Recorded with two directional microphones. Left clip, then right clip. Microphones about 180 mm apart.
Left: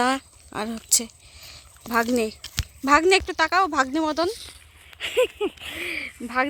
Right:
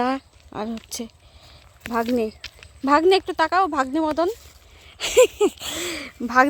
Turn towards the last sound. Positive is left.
turn(degrees=-35)  # may be behind; listen again after turning